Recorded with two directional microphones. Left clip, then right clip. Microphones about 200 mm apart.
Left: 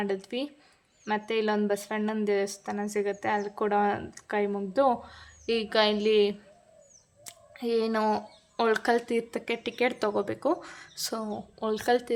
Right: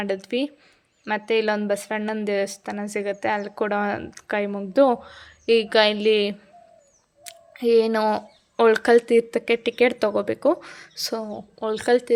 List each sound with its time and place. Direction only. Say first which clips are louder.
0.0 s a woman's voice: right 6 dB; 25° right (ahead or behind)